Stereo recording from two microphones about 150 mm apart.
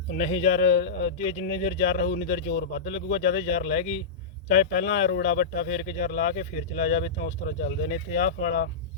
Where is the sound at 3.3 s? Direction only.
50° left (ahead or behind).